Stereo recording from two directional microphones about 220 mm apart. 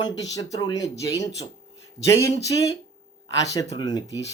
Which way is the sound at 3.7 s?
20° left (ahead or behind).